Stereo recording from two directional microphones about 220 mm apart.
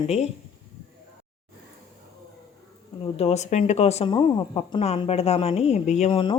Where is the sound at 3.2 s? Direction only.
30° left (ahead or behind).